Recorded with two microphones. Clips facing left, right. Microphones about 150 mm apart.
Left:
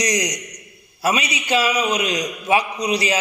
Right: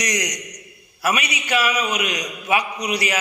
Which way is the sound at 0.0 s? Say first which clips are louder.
Left 4 dB; 25° left (ahead or behind).